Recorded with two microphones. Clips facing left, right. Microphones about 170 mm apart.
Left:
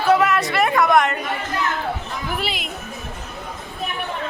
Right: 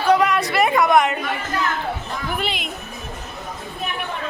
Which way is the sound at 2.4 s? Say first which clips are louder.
Right 1 dB; 5° left (ahead or behind).